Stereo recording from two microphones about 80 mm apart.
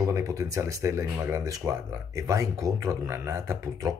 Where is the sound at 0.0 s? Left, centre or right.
Right.